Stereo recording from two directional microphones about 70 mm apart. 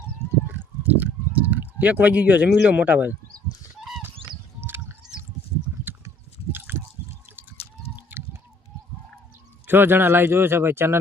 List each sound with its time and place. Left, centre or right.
0.8 s speech: right
6.5 s chewing: right
8.2 s a sound: right
9.6 s speech: right